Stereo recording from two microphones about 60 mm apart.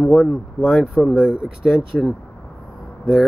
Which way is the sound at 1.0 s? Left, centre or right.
Centre.